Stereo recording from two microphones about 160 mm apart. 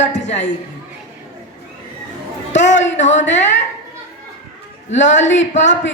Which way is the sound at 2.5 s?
50° left (ahead or behind).